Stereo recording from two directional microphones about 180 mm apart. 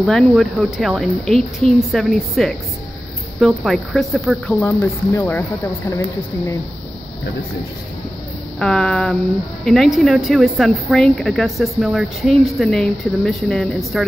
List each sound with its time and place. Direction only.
0.0 s speech: centre (ahead or behind)
8.5 s speech: 5° left (ahead or behind)